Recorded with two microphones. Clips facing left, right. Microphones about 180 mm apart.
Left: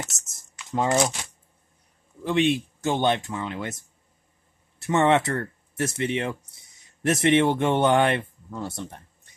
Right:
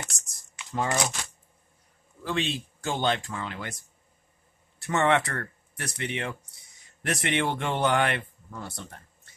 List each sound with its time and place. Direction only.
0.1 s speech: 20° left (ahead or behind)
2.2 s speech: 20° left (ahead or behind)